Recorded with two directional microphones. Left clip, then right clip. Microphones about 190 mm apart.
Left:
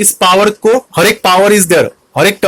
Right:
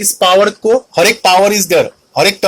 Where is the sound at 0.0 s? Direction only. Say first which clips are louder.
Left 1 dB; 35° left (ahead or behind).